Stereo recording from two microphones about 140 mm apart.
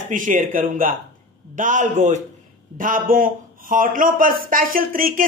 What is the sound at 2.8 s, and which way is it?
A man's voice, 75° right (ahead or behind).